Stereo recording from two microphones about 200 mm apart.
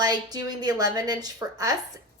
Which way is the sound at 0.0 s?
20° right (ahead or behind).